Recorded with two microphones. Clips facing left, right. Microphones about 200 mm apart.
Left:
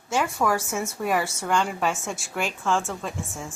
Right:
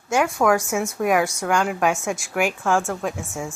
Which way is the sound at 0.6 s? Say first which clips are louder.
Right 5 dB; 10° right (ahead or behind).